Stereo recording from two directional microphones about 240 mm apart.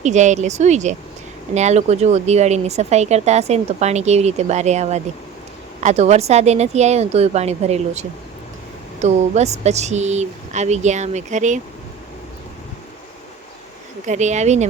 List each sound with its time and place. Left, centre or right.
0.0 s speech: right
14.1 s speech: right